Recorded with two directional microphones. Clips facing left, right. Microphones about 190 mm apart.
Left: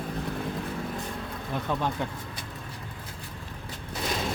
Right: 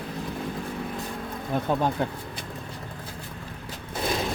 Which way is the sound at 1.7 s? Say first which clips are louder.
Right 4 dB; 40° right (ahead or behind).